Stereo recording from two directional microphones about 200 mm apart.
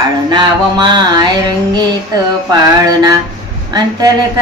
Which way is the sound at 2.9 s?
20° right (ahead or behind).